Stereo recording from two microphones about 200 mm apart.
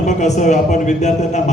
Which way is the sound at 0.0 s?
35° left (ahead or behind).